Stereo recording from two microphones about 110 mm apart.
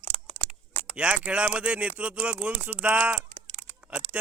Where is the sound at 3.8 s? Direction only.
15° right (ahead or behind).